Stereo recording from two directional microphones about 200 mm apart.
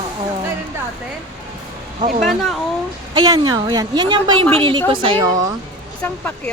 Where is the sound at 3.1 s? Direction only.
20° right (ahead or behind).